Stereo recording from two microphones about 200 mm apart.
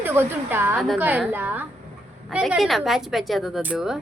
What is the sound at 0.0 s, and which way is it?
A woman's voice, 10° right (ahead or behind).